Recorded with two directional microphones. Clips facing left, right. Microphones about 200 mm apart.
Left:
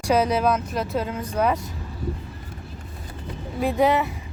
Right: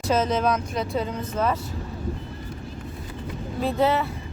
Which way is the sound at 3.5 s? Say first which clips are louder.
Left 2 dB; 15° left (ahead or behind).